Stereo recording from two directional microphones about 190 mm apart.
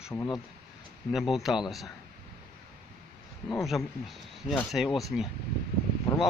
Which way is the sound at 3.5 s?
Centre (ahead or behind).